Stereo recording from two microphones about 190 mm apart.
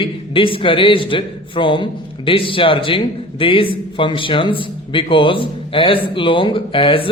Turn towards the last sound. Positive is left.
turn(degrees=25)  # may be behind; listen again after turning